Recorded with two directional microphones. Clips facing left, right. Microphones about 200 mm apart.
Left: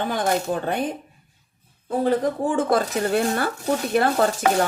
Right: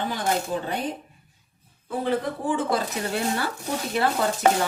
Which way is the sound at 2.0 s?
45° left (ahead or behind).